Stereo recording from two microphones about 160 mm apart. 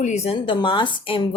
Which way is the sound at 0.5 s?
30° left (ahead or behind).